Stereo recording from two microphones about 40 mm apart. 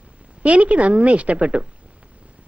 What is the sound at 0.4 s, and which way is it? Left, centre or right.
A woman's voice, right.